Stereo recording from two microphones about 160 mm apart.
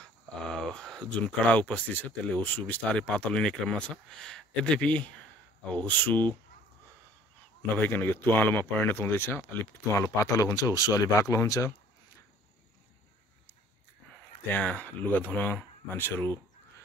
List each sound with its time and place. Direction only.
0.0 s speech: 5° left (ahead or behind)
7.7 s speech: 10° left (ahead or behind)
14.5 s speech: 10° left (ahead or behind)